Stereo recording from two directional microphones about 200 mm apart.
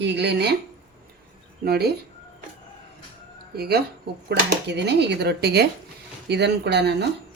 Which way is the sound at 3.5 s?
50° right (ahead or behind).